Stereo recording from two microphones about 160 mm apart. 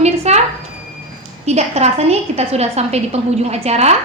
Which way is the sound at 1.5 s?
45° right (ahead or behind).